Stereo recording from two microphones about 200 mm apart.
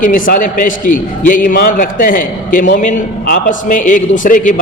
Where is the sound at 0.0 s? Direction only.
40° left (ahead or behind).